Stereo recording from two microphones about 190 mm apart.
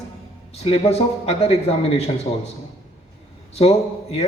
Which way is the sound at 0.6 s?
35° left (ahead or behind).